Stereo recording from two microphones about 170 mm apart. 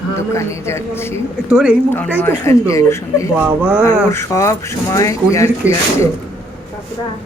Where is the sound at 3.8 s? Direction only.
15° left (ahead or behind).